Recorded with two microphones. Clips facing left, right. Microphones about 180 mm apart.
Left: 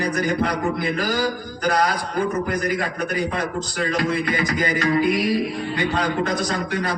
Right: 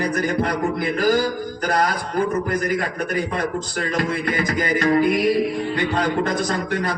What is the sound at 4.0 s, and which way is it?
A man's voice, 50° right (ahead or behind).